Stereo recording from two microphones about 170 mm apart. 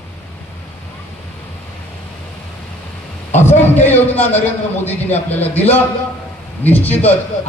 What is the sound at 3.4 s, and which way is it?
A man's voice, 10° left (ahead or behind).